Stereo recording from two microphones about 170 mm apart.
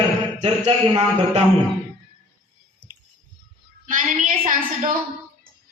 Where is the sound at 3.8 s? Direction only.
50° right (ahead or behind).